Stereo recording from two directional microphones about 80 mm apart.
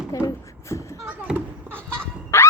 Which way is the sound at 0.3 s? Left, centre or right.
Left.